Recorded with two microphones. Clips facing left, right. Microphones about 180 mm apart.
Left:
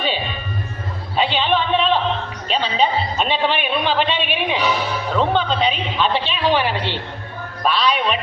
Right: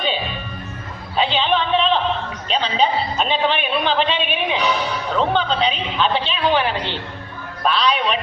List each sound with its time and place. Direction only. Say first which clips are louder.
1.1 s music: even; 5° left (ahead or behind)
2.5 s a man's voice: even; centre (ahead or behind)